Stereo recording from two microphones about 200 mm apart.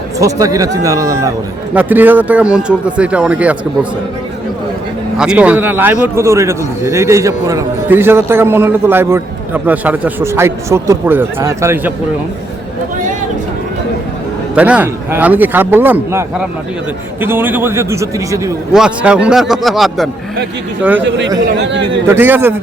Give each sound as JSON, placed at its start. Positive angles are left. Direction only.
{"t": 0.2, "sound": "a man's voice", "side_deg": -15}
{"t": 5.1, "sound": "a man's voice", "side_deg": -5}
{"t": 14.5, "sound": "a man's voice", "side_deg": -5}
{"t": 18.7, "sound": "a man's voice", "side_deg": -5}
{"t": 22.0, "sound": "a man's voice", "side_deg": -10}